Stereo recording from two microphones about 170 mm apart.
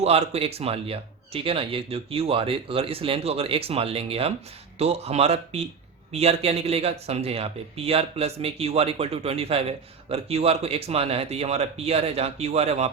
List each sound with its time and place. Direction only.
0.0 s speech: 40° right (ahead or behind)